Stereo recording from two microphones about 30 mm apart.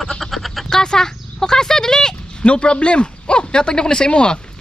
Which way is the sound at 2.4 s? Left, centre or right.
Left.